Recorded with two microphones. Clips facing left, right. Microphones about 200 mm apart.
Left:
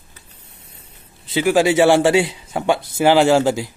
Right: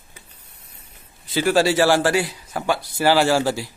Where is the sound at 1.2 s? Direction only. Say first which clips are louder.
Left 2 dB; 20° left (ahead or behind).